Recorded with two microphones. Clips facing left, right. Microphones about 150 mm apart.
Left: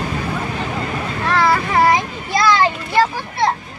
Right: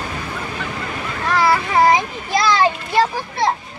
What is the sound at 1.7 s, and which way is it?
A child's voice, 20° right (ahead or behind).